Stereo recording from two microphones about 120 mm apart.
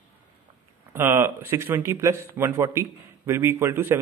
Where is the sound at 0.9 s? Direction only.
20° right (ahead or behind).